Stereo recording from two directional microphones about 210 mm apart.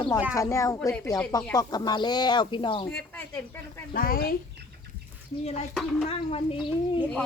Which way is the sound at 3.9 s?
45° left (ahead or behind).